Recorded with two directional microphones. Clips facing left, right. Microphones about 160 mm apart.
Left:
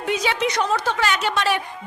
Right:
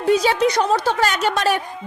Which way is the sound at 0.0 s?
35° right (ahead or behind).